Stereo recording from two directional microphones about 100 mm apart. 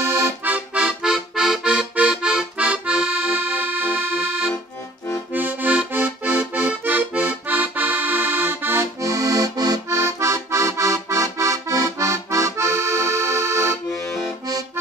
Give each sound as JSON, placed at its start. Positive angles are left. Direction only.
{"t": 0.0, "sound": "accordion", "side_deg": -30}
{"t": 0.5, "sound": "music", "side_deg": -10}
{"t": 6.7, "sound": "accordion", "side_deg": -15}